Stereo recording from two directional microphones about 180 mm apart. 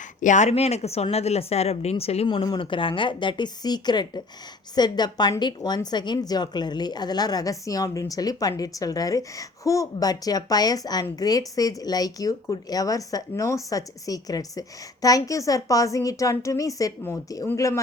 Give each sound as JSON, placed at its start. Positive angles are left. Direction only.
{"t": 0.2, "sound": "speech", "side_deg": 40}